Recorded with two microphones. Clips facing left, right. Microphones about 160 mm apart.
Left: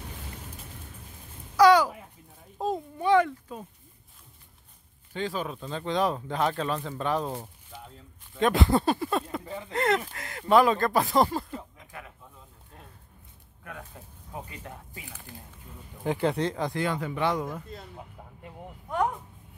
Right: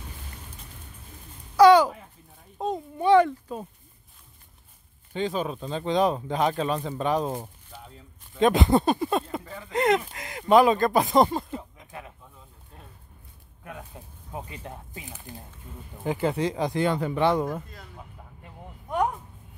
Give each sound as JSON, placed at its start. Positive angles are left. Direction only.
{"t": 1.6, "sound": "a sound", "side_deg": -25}
{"t": 2.6, "sound": "speech", "side_deg": 0}
{"t": 3.0, "sound": "speech", "side_deg": -30}
{"t": 5.1, "sound": "speech", "side_deg": -20}
{"t": 9.4, "sound": "speech", "side_deg": 20}
{"t": 9.7, "sound": "speech", "side_deg": -15}
{"t": 13.7, "sound": "speech", "side_deg": -20}
{"t": 16.0, "sound": "speech", "side_deg": 0}
{"t": 16.9, "sound": "speech", "side_deg": -35}
{"t": 17.6, "sound": "speech", "side_deg": 25}